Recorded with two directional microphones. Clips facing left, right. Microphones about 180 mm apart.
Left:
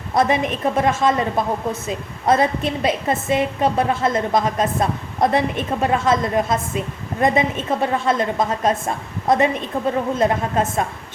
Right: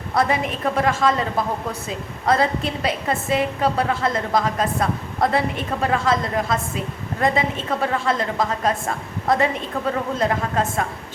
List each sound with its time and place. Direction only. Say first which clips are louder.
0.1 s a woman's voice: left 3 dB; 20° left (ahead or behind)
2.2 s a woman's voice: left 2 dB; 20° left (ahead or behind)